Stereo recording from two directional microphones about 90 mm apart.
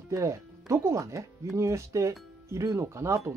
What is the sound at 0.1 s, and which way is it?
Speech, 35° right (ahead or behind).